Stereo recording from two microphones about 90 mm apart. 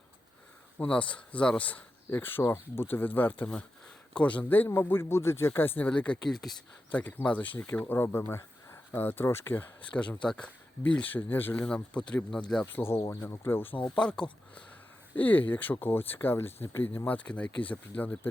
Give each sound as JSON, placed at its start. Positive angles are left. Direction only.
{"t": 0.8, "sound": "speech", "side_deg": 15}
{"t": 6.3, "sound": "speech", "side_deg": 0}
{"t": 6.9, "sound": "speech", "side_deg": 20}
{"t": 12.7, "sound": "speech", "side_deg": 30}
{"t": 15.1, "sound": "speech", "side_deg": 20}